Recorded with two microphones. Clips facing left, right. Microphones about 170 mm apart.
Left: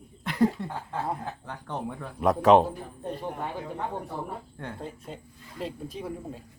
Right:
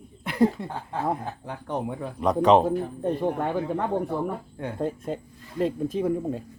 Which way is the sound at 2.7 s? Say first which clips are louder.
Right 9 dB; 60° right (ahead or behind).